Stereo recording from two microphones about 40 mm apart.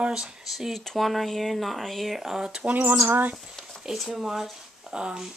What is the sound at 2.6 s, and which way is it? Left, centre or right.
Speech, right.